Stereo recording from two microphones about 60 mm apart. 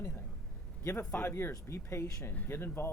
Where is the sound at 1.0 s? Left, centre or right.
Left.